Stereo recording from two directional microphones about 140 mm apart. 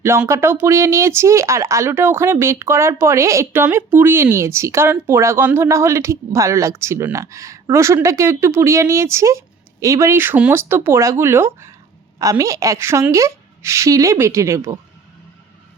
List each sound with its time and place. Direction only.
0.3 s speech: 20° right (ahead or behind)